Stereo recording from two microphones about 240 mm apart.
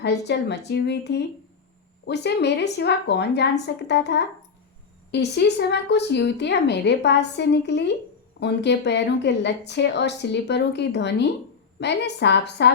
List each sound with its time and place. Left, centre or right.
0.0 s speech: left